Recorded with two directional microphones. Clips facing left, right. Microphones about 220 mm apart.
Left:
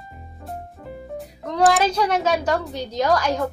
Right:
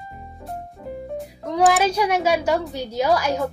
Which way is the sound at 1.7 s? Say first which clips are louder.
Even; 10° right (ahead or behind).